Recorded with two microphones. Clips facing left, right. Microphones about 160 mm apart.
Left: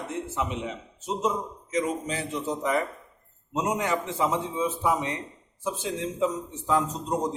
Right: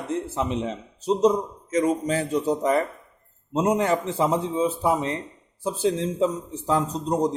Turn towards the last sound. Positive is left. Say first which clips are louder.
# right 4 dB
turn(degrees=-35)  # may be behind; listen again after turning